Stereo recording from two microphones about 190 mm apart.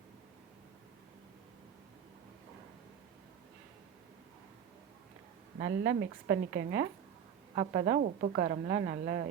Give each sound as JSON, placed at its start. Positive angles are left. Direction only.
{"t": 5.5, "sound": "a woman's voice", "side_deg": -50}
{"t": 7.5, "sound": "a woman's voice", "side_deg": -35}